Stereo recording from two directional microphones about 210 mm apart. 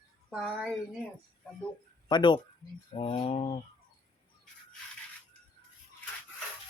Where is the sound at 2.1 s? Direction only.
20° left (ahead or behind).